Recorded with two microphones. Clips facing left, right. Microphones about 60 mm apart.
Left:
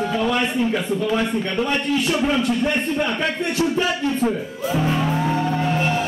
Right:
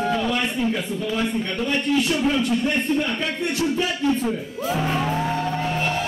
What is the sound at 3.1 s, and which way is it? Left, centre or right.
Speech, left.